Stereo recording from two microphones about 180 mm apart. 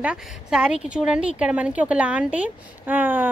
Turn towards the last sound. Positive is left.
turn(degrees=-10)  # may be behind; listen again after turning